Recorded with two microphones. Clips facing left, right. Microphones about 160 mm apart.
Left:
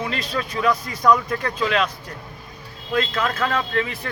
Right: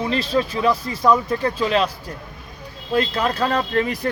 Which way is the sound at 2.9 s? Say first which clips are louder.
Right 2 dB; 35° right (ahead or behind).